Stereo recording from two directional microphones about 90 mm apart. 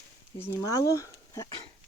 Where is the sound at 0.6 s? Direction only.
40° left (ahead or behind).